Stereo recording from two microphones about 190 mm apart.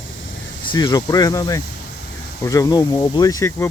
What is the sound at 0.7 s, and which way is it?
Speech, 20° left (ahead or behind).